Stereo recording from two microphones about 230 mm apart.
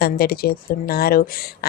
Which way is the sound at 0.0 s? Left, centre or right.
Left.